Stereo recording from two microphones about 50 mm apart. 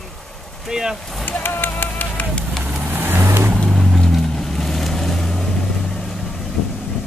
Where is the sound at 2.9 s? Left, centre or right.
Right.